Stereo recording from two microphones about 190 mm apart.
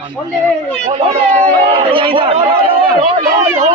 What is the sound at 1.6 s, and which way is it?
Speech, 25° right (ahead or behind).